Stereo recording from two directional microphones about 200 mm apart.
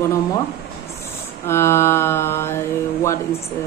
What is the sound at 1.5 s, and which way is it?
Mantra, 15° left (ahead or behind).